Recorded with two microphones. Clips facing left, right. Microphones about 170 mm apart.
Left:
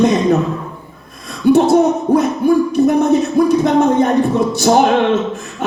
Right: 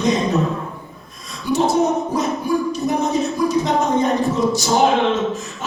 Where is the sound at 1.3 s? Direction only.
60° left (ahead or behind).